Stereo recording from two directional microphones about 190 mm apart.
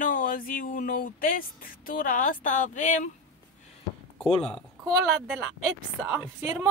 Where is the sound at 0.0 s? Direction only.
45° left (ahead or behind).